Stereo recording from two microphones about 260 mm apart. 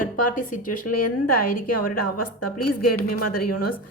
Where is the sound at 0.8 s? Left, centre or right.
Left.